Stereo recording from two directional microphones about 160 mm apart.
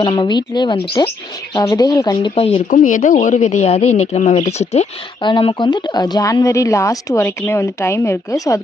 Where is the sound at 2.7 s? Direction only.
55° left (ahead or behind).